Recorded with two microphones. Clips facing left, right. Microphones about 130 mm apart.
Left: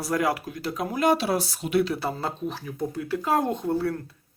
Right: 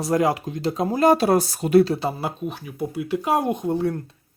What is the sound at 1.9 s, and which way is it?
Speech, 15° right (ahead or behind).